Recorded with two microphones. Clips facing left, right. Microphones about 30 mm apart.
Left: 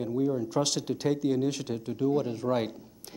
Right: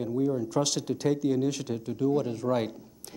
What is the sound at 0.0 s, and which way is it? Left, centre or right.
A man's voice, centre.